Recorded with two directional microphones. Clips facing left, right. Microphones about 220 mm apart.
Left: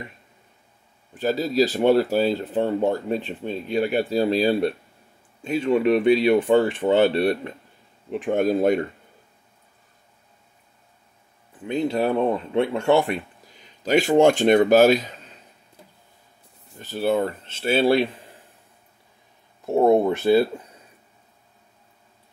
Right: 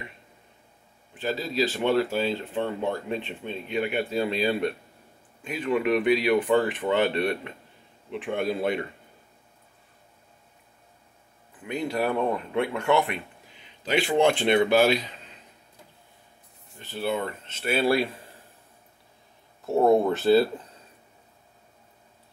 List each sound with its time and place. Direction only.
1.1 s a man's voice: 40° left (ahead or behind)
11.6 s speech: 25° left (ahead or behind); by 15.0 s 45° left (ahead or behind)
16.7 s speech: 40° left (ahead or behind)
19.6 s speech: 15° left (ahead or behind)